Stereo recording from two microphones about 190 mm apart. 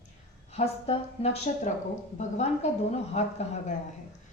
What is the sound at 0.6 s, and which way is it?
A woman's voice, 30° left (ahead or behind).